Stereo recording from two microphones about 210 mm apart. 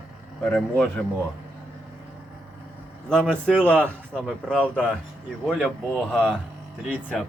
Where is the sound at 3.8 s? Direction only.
5° left (ahead or behind).